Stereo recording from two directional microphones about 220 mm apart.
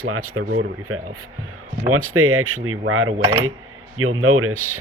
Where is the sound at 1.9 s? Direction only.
75° right (ahead or behind).